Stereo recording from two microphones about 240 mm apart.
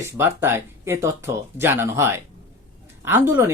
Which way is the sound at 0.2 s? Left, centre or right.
Centre.